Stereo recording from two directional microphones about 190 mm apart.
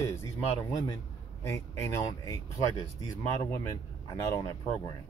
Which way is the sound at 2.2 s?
20° left (ahead or behind).